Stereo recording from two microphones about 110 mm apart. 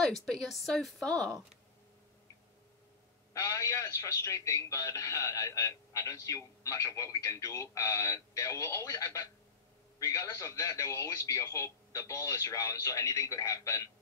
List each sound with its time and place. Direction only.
0.0 s a woman's voice: 5° left (ahead or behind)
3.3 s a man's voice: 30° left (ahead or behind)